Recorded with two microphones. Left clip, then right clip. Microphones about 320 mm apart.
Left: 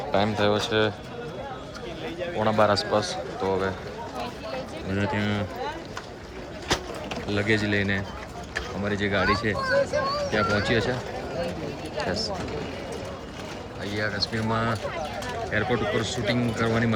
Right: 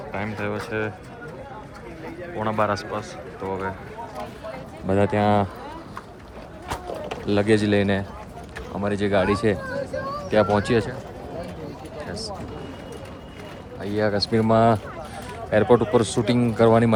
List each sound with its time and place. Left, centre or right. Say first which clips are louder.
0.1 s speech: left 6 dB; centre
2.4 s speech: left 2 dB; centre
4.9 s a man's voice: right 9 dB; centre
7.3 s a man's voice: right 5 dB; centre
13.9 s a man's voice: right 6 dB; centre